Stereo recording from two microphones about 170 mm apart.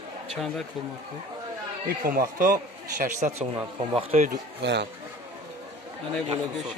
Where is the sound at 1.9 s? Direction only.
60° right (ahead or behind); by 4.4 s 45° right (ahead or behind).